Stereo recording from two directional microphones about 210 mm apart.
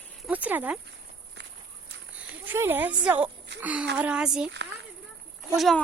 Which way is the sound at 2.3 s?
10° right (ahead or behind).